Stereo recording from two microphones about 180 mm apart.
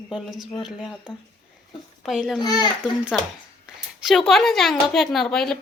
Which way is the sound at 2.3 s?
20° left (ahead or behind).